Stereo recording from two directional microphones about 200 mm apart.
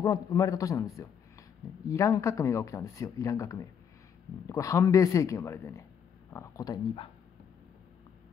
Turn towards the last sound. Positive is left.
turn(degrees=25)  # may be behind; listen again after turning